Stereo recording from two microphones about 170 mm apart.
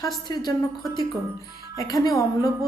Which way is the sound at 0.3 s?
20° left (ahead or behind).